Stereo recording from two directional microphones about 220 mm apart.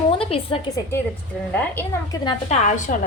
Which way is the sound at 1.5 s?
10° left (ahead or behind).